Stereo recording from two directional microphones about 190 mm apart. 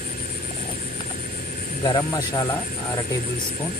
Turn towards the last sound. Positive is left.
turn(degrees=15)  # may be behind; listen again after turning